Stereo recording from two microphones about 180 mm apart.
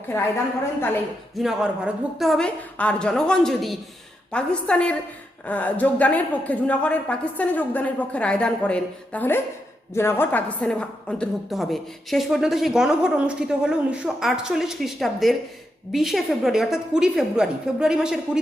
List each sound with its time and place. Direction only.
1.4 s a woman's voice: 5° right (ahead or behind)